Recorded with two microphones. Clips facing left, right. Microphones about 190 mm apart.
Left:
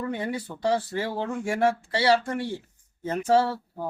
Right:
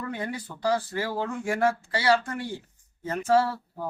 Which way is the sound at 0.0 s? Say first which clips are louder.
Left 3 dB; 25° left (ahead or behind).